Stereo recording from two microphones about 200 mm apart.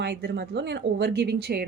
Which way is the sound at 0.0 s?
55° right (ahead or behind).